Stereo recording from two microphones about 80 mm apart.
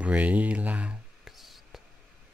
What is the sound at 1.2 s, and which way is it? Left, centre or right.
Whispering, centre.